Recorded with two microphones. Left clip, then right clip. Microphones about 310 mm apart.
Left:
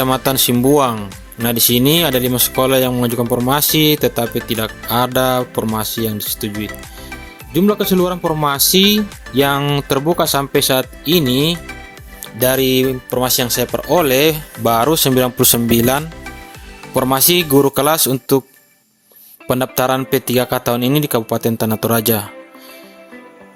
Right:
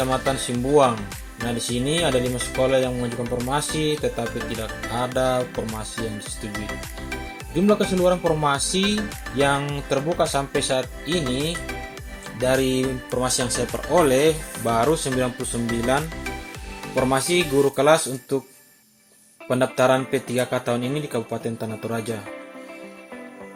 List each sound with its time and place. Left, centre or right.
0.0 s speech: left
6.5 s speech: centre
7.5 s speech: left
16.9 s speech: left
19.5 s speech: left